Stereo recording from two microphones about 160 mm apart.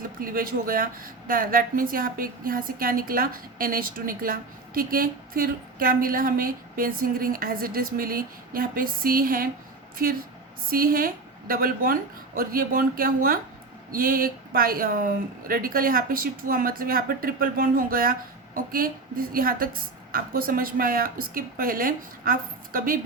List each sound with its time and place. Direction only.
0.2 s a woman's voice: 65° right (ahead or behind)
10.7 s a woman's voice: 65° right (ahead or behind)